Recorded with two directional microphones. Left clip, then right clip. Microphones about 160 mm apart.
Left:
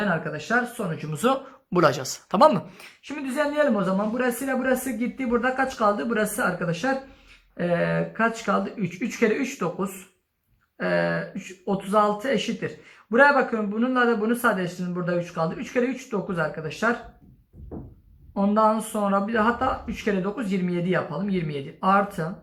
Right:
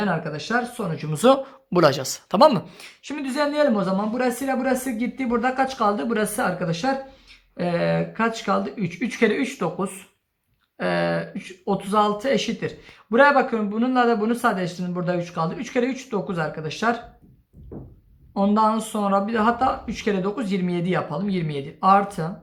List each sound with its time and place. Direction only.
0.0 s speech: 35° right (ahead or behind)
1.7 s speech: 15° right (ahead or behind)
18.3 s speech: 30° right (ahead or behind)